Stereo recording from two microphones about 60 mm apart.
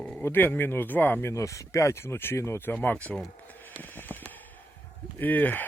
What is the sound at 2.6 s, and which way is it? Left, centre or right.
Speech, left.